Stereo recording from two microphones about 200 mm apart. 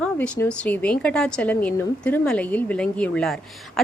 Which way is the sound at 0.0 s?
5° left (ahead or behind).